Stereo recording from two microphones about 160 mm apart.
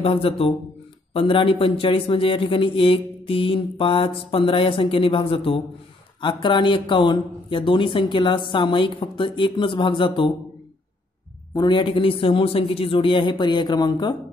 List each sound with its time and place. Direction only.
0.0 s a man's voice: 35° left (ahead or behind)
11.5 s a man's voice: 30° left (ahead or behind)